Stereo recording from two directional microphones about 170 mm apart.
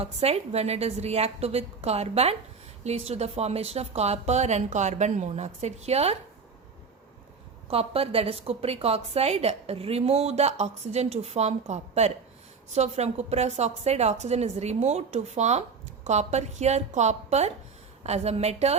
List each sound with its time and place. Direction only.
0.0 s a woman's voice: 35° right (ahead or behind)
7.7 s a woman's voice: 35° right (ahead or behind)